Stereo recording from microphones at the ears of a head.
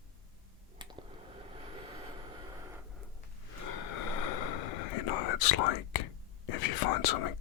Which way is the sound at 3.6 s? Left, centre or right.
Left.